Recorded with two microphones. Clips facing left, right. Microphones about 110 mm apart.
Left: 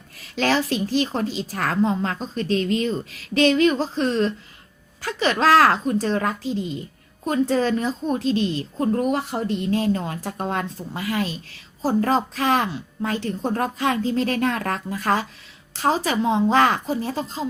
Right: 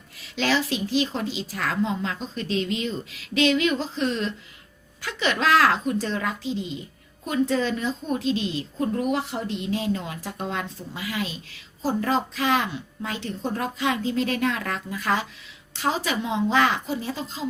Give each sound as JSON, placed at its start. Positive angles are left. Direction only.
{"t": 0.2, "sound": "a woman's voice", "side_deg": 45}